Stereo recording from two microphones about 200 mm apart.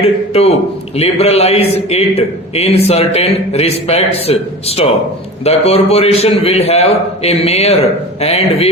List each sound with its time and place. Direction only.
0.0 s a man's voice: 30° left (ahead or behind)